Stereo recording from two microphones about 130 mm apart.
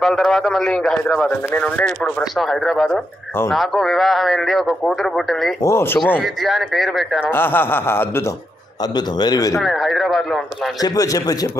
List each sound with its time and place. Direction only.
0.0 s speech: 5° left (ahead or behind)
5.6 s speech: 20° left (ahead or behind)
6.2 s speech: centre (ahead or behind)
7.2 s a sound: 15° left (ahead or behind)
8.9 s a man's voice: 30° left (ahead or behind)
9.6 s speech: centre (ahead or behind)
10.8 s speech: 25° left (ahead or behind)